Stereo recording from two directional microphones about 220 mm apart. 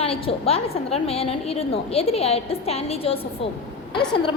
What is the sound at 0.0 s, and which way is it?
A woman's voice, 25° left (ahead or behind).